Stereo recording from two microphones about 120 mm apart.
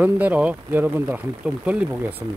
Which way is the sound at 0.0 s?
15° right (ahead or behind).